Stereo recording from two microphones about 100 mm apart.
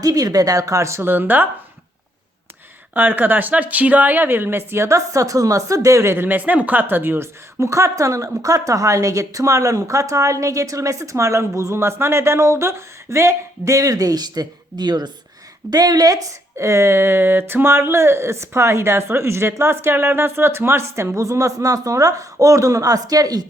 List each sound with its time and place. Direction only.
0.0 s a woman's voice: 40° right (ahead or behind); by 1.5 s 20° right (ahead or behind)
2.9 s a woman's voice: 20° right (ahead or behind); by 23.5 s 40° right (ahead or behind)